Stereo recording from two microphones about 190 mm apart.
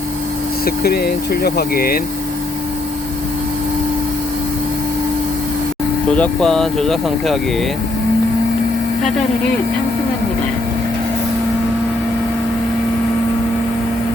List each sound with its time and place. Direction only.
0.6 s speech: 55° left (ahead or behind)
6.1 s speech: 5° left (ahead or behind)